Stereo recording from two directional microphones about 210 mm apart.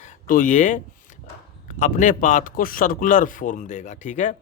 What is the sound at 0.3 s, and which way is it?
Speech, 40° left (ahead or behind).